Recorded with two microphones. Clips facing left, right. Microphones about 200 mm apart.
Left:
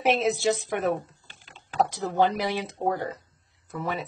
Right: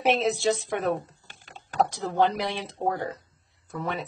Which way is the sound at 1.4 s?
45° right (ahead or behind).